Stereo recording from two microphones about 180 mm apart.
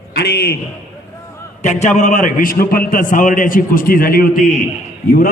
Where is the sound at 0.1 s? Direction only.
65° left (ahead or behind).